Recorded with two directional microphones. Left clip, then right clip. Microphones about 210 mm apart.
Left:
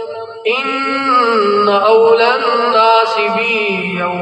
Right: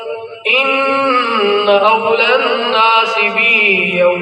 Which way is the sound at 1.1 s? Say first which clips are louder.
Left 1 dB; 55° left (ahead or behind).